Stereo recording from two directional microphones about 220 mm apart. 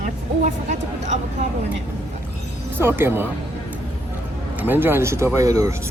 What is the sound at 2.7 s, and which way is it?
Speech, 10° right (ahead or behind).